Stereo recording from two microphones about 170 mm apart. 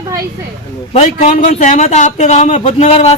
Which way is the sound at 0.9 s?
45° left (ahead or behind).